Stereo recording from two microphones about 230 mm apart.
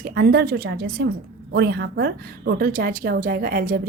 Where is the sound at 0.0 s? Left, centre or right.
Right.